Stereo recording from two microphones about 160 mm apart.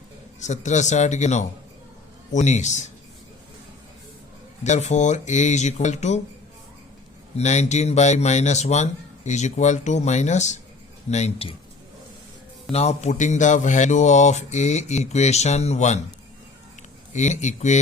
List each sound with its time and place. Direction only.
0.3 s speech: 45° left (ahead or behind)
4.6 s speech: 45° left (ahead or behind)
7.3 s speech: 45° left (ahead or behind)
12.7 s speech: 45° left (ahead or behind)
17.2 s speech: 45° left (ahead or behind)